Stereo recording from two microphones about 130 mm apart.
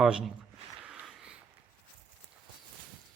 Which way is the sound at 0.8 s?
5° right (ahead or behind).